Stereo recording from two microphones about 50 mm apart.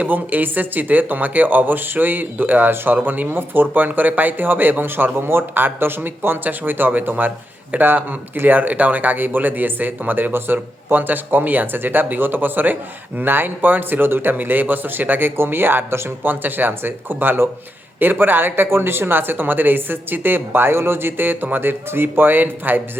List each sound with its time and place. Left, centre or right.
0.0 s speech: right